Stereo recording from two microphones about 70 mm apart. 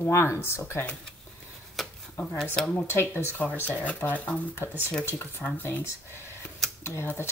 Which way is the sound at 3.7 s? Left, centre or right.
Left.